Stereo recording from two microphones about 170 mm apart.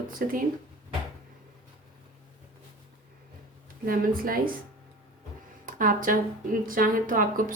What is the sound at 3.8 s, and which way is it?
Speech, 55° right (ahead or behind).